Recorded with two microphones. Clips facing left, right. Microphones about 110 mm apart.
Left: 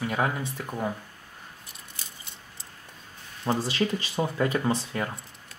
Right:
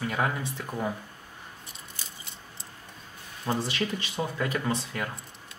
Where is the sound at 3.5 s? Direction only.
30° left (ahead or behind).